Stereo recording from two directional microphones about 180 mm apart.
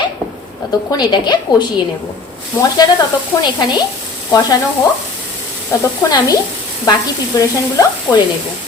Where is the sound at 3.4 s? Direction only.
25° left (ahead or behind).